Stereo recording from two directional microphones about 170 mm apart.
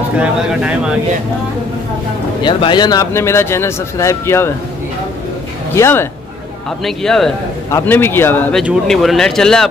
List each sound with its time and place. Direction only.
0.2 s speech: 5° right (ahead or behind)
2.4 s speech: 25° left (ahead or behind)
5.8 s speech: 15° left (ahead or behind)
6.8 s speech: centre (ahead or behind)